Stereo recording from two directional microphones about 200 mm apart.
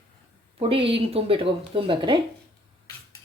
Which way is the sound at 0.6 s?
25° right (ahead or behind).